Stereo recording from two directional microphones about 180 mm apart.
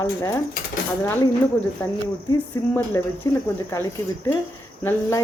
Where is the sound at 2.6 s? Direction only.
15° left (ahead or behind).